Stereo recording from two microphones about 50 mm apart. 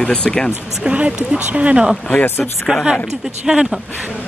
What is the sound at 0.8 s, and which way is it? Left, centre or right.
Speech, right.